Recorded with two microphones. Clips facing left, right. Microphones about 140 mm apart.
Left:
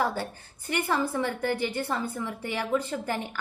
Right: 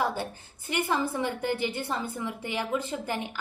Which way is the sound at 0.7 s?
15° right (ahead or behind).